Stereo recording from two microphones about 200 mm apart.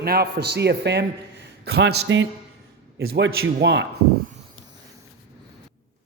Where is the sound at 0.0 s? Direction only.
50° right (ahead or behind).